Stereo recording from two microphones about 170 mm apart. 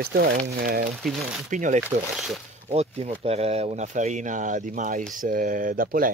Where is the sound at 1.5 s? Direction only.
50° right (ahead or behind).